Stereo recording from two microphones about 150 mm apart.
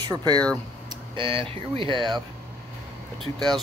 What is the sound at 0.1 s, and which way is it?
Speech, 25° right (ahead or behind).